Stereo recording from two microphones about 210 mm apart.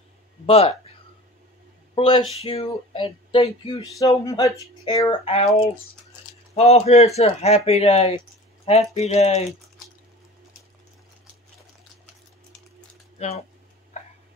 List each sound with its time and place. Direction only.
0.5 s speech: 30° left (ahead or behind)
2.0 s speech: 25° left (ahead or behind)
6.5 s speech: 30° left (ahead or behind)
13.2 s speech: 30° left (ahead or behind)